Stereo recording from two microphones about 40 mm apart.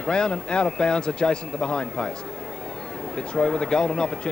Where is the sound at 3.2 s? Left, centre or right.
Left.